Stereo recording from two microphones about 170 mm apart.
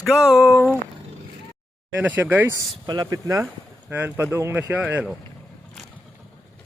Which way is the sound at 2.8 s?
20° right (ahead or behind).